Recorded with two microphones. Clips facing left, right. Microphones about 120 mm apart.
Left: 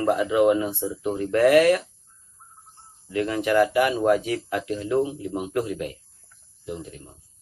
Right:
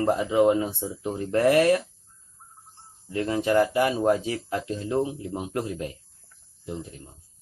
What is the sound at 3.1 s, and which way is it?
Speech, 30° right (ahead or behind).